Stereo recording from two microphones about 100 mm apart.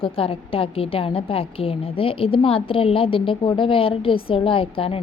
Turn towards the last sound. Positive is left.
turn(degrees=65)  # may be behind; listen again after turning